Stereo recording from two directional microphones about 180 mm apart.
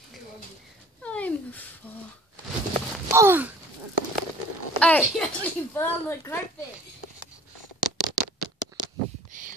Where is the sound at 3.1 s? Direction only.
15° right (ahead or behind).